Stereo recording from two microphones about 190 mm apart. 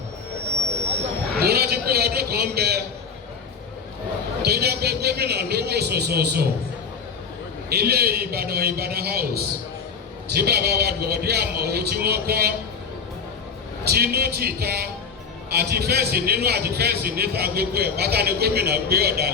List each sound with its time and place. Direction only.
1.4 s a sound: 55° right (ahead or behind)
4.4 s a man's voice: 60° right (ahead or behind)
7.7 s a man's voice: 55° right (ahead or behind)
13.8 s a man's voice: 55° right (ahead or behind)